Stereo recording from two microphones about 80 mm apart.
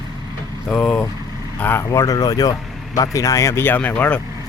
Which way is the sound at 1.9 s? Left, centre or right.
Left.